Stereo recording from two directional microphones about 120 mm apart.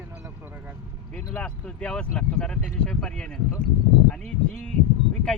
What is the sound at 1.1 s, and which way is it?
Speech, 10° left (ahead or behind).